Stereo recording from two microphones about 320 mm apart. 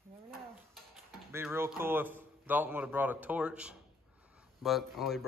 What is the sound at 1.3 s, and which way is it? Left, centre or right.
A man's voice, centre.